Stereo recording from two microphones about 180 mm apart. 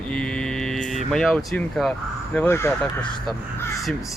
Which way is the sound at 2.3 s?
10° left (ahead or behind).